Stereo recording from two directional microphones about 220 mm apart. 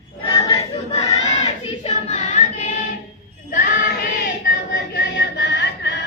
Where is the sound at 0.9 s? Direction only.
30° left (ahead or behind).